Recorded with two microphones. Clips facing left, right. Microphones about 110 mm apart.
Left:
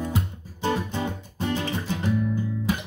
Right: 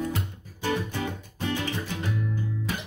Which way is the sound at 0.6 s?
25° left (ahead or behind).